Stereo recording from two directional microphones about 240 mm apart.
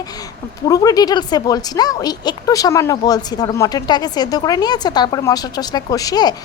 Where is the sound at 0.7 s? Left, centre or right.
Centre.